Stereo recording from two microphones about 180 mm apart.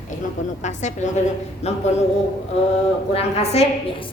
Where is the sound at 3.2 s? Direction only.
35° left (ahead or behind).